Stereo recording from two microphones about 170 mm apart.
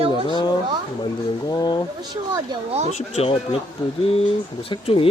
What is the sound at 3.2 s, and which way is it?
Speech, 30° left (ahead or behind).